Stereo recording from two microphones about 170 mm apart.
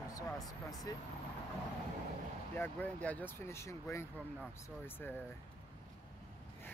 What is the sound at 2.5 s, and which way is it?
Speech, 10° left (ahead or behind).